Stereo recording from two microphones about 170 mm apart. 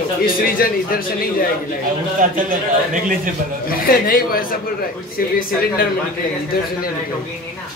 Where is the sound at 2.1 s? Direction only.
50° right (ahead or behind).